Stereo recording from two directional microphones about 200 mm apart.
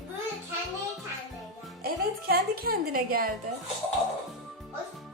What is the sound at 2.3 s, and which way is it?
A woman's voice, 50° right (ahead or behind).